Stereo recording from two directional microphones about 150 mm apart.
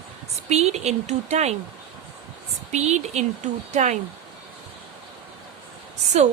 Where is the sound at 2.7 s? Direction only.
50° right (ahead or behind).